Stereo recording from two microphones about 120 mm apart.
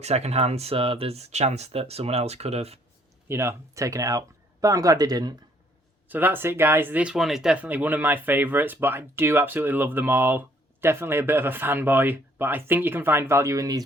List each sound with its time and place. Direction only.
0.0 s speech: 60° right (ahead or behind)
3.2 s speech: 20° right (ahead or behind)
6.1 s speech: 15° right (ahead or behind)